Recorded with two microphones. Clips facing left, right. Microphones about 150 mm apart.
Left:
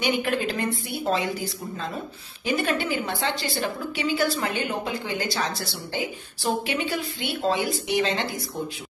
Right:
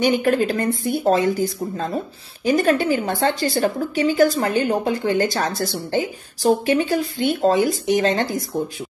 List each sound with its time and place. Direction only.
0.0 s a woman's voice: 40° right (ahead or behind)